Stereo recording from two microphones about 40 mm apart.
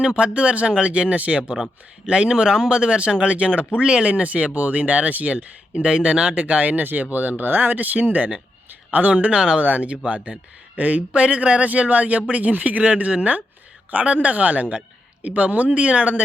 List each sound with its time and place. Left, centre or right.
0.0 s speech: right
3.3 s a man's voice: right
3.8 s speech: right
4.1 s a man's voice: right
9.3 s speech: right
9.6 s a man's voice: right